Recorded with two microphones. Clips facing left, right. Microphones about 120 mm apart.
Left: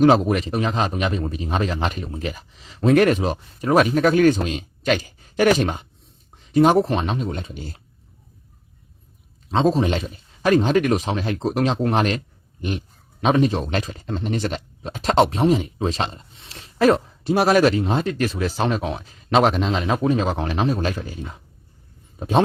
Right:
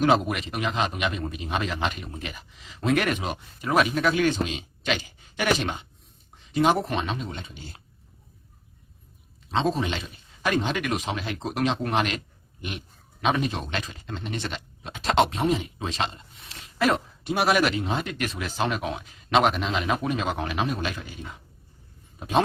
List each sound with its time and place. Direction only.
0.0 s speech: 35° left (ahead or behind)
9.5 s speech: 40° left (ahead or behind)
13.2 s speech: 35° left (ahead or behind)